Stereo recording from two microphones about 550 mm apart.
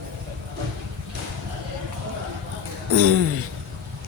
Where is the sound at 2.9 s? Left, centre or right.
Right.